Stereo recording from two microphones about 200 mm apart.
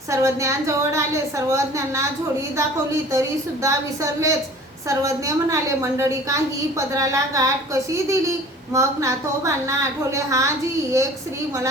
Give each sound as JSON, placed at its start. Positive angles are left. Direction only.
{"t": 0.1, "sound": "a woman's voice", "side_deg": -15}